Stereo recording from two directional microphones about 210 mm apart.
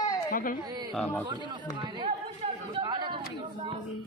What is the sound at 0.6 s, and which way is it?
Speech, 20° right (ahead or behind).